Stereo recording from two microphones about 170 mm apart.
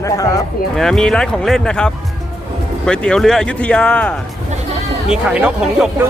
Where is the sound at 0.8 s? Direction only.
5° left (ahead or behind).